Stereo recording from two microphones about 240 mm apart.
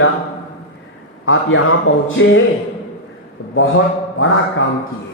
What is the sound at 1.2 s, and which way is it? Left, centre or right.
A man's voice, left.